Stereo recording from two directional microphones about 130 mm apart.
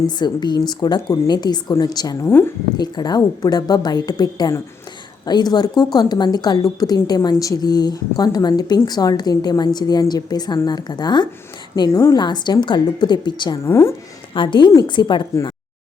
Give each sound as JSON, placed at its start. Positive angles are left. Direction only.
{"t": 0.2, "sound": "a woman's voice", "side_deg": 35}
{"t": 11.9, "sound": "a woman's voice", "side_deg": 20}
{"t": 12.1, "sound": "a woman's voice", "side_deg": 35}
{"t": 13.7, "sound": "a woman's voice", "side_deg": 20}
{"t": 14.3, "sound": "a woman's voice", "side_deg": 40}